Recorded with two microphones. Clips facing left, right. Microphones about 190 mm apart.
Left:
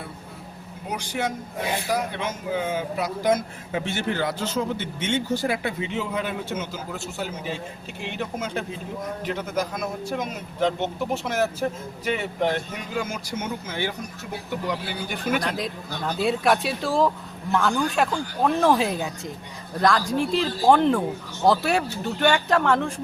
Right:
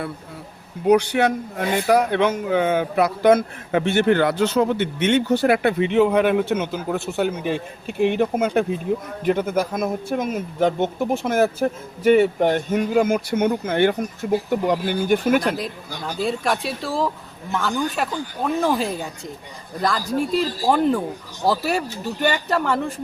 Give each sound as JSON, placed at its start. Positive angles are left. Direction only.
{"t": 0.9, "sound": "a man's voice", "side_deg": -65}
{"t": 15.4, "sound": "speech", "side_deg": 0}
{"t": 16.1, "sound": "speech", "side_deg": 0}